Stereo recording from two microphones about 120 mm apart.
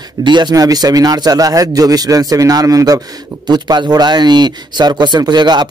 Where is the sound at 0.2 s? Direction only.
40° right (ahead or behind).